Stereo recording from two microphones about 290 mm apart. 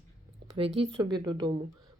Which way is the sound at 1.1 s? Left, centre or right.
Centre.